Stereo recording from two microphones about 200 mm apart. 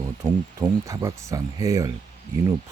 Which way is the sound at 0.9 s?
15° right (ahead or behind).